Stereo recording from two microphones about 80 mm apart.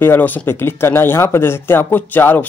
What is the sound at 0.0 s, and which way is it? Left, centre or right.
Speech, left.